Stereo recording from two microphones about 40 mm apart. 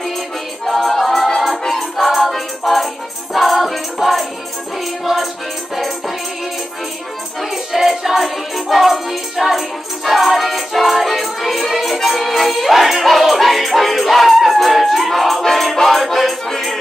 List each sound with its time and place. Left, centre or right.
0.7 s music: centre
7.5 s music: centre